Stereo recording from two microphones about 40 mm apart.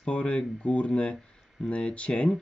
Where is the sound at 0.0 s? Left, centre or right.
Left.